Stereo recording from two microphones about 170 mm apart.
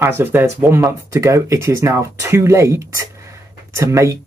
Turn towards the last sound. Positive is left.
turn(degrees=-20)  # may be behind; listen again after turning